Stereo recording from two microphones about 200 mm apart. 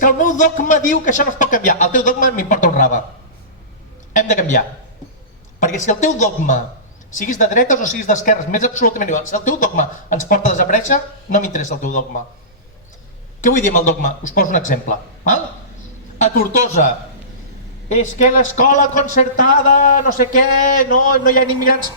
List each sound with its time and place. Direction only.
0.0 s speech: 40° left (ahead or behind)
4.1 s speech: 40° left (ahead or behind)
13.4 s a man's voice: 40° left (ahead or behind)